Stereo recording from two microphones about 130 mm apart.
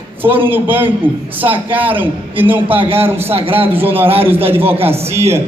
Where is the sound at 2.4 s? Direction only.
15° right (ahead or behind).